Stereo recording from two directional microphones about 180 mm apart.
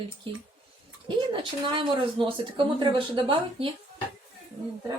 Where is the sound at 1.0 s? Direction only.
25° right (ahead or behind).